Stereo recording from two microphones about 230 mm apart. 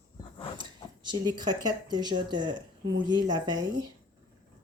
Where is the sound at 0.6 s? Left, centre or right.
Centre.